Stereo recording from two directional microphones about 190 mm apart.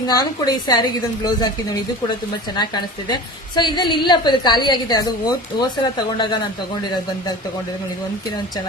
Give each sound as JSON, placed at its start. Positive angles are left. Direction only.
{"t": 0.1, "sound": "a woman's voice", "side_deg": 20}
{"t": 2.6, "sound": "a woman's voice", "side_deg": 25}